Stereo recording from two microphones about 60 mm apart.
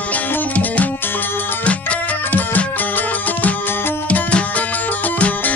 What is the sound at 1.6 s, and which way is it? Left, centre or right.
Music, left.